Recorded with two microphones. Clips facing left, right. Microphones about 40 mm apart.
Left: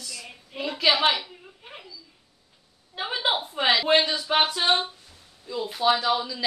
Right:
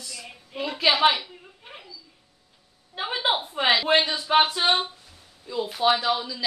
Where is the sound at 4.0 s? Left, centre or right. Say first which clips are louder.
Even; centre.